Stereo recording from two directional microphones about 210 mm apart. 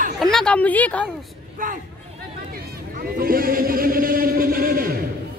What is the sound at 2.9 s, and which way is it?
Chant, 45° right (ahead or behind).